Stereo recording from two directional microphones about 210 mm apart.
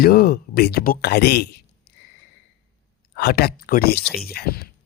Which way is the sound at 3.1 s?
45° left (ahead or behind).